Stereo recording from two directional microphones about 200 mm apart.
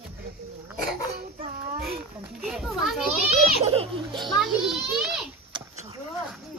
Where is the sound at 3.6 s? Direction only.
30° right (ahead or behind).